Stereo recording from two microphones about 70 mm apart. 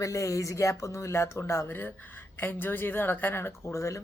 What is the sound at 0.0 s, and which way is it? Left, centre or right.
A woman's voice, left.